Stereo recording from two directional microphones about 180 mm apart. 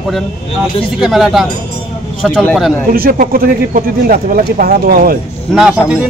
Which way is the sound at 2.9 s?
50° right (ahead or behind).